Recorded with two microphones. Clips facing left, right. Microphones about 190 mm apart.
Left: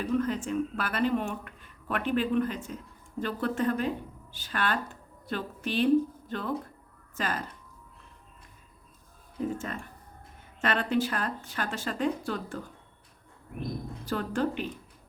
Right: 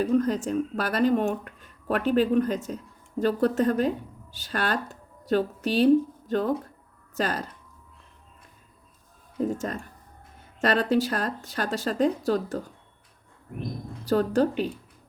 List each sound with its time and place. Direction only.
0.0 s speech: 40° right (ahead or behind)
9.4 s speech: 40° right (ahead or behind)
14.0 s speech: 40° right (ahead or behind)